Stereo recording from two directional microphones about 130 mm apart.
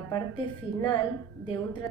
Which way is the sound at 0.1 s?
35° left (ahead or behind).